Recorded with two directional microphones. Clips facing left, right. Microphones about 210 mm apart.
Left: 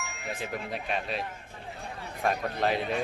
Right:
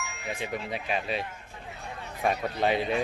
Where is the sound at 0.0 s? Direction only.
Centre (ahead or behind).